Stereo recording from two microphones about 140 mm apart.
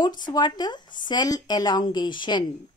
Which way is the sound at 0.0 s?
30° left (ahead or behind).